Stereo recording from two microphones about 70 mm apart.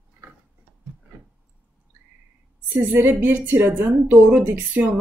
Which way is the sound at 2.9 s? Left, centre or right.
Right.